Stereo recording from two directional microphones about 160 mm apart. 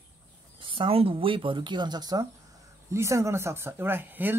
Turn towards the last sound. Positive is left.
turn(degrees=-10)  # may be behind; listen again after turning